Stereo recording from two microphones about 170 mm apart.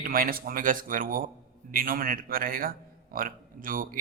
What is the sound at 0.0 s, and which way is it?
A man's voice, 55° right (ahead or behind).